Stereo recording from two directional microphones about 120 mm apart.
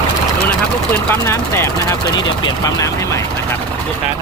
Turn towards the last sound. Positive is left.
turn(degrees=25)  # may be behind; listen again after turning